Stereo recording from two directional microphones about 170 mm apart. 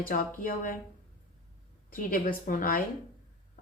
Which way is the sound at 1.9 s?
55° left (ahead or behind).